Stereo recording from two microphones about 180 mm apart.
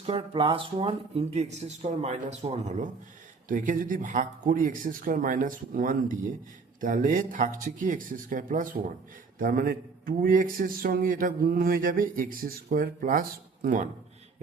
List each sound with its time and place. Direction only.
0.0 s a man's voice: 35° right (ahead or behind); by 13.8 s 50° right (ahead or behind)